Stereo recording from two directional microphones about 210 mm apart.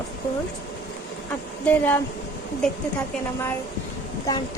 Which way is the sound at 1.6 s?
10° left (ahead or behind).